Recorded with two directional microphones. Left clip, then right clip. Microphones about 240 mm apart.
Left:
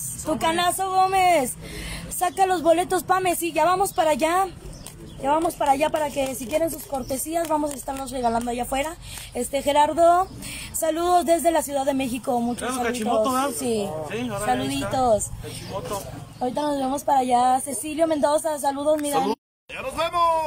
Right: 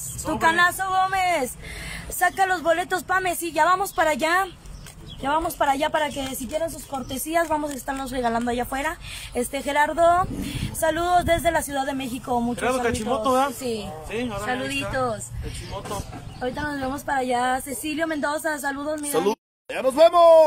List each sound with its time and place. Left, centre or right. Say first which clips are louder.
0.3 s speech: right 3 dB; centre
12.5 s a man's voice: right 3 dB; centre
13.6 s speech: left 4 dB; centre
14.1 s a man's voice: right 3 dB; centre
15.0 s speech: left 8 dB; centre
16.3 s speech: left 3 dB; centre
19.7 s speech: right 9 dB; right